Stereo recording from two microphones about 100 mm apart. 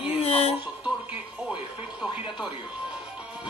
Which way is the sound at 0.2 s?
90° left.